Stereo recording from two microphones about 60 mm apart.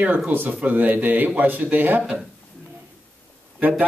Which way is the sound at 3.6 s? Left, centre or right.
Right.